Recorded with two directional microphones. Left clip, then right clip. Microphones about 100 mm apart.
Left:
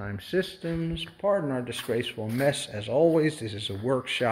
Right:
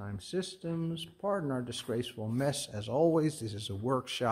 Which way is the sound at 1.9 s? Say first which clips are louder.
Left 6 dB; 50° right (ahead or behind).